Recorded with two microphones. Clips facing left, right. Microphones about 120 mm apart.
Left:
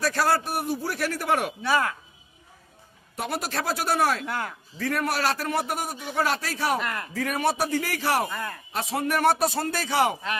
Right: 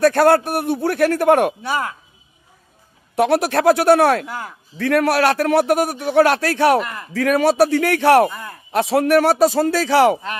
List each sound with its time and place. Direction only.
0.0 s a man's voice: 60° right (ahead or behind)
1.7 s a woman's voice: 15° right (ahead or behind)
3.2 s a man's voice: 75° right (ahead or behind)
7.2 s a man's voice: 90° right; by 8.3 s 65° right (ahead or behind)
8.7 s a man's voice: 80° right